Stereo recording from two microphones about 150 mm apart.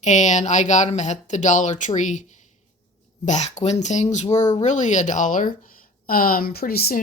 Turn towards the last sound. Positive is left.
turn(degrees=90)